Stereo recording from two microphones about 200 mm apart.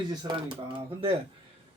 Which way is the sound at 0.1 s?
20° right (ahead or behind).